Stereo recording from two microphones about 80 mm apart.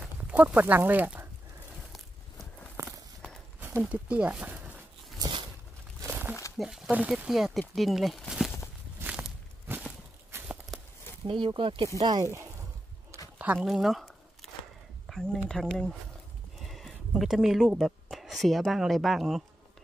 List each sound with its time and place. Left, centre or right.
0.0 s speech: centre
3.9 s speech: centre
5.2 s a sound: right
6.0 s crumpling: right
6.5 s speech: centre
6.9 s speech: centre
7.2 s speech: centre
10.3 s a sound: right
11.2 s speech: right
12.0 s speech: right
12.3 s a sound: right
13.6 s speech: centre